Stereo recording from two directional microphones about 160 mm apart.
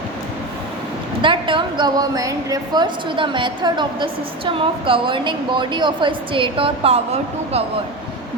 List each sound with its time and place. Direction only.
1.2 s a woman's voice: 30° right (ahead or behind)